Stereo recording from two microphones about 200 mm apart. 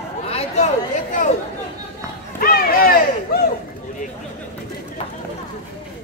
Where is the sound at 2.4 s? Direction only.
45° left (ahead or behind).